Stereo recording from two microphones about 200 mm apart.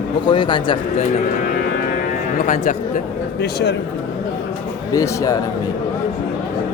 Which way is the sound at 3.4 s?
60° left (ahead or behind).